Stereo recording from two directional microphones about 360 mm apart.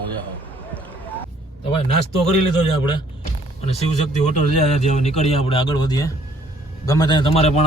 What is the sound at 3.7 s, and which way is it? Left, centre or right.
A man's voice, centre.